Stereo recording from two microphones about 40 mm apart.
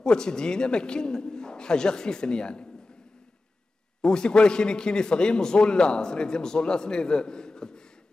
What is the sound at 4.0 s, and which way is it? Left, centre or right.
A man's voice, centre.